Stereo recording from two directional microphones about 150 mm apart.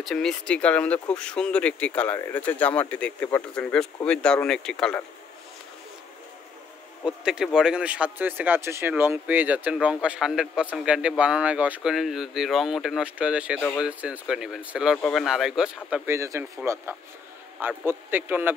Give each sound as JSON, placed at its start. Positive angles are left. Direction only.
{"t": 0.0, "sound": "speech", "side_deg": 5}
{"t": 7.1, "sound": "speech", "side_deg": -5}
{"t": 16.1, "sound": "speech", "side_deg": -20}